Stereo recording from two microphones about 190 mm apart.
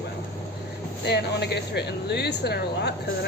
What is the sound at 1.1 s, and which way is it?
Speech, 60° left (ahead or behind).